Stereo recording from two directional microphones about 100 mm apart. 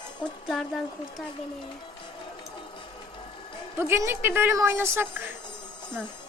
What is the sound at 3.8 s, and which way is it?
A woman's voice, 25° right (ahead or behind).